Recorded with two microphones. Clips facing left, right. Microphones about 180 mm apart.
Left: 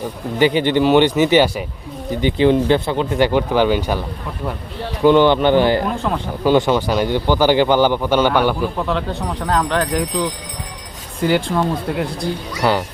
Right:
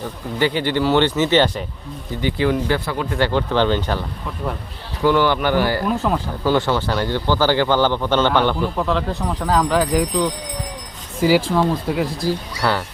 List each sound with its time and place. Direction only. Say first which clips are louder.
0.3 s speech: left 4 dB; 15° left (ahead or behind)
2.2 s speech: left 5 dB; 20° left (ahead or behind)
5.0 s speech: left 5 dB; 20° left (ahead or behind)
6.0 s speech: right 1 dB; centre (ahead or behind)
6.4 s speech: left 5 dB; 15° left (ahead or behind); by 12.3 s centre (ahead or behind)
12.6 s speech: left 3 dB; 15° left (ahead or behind)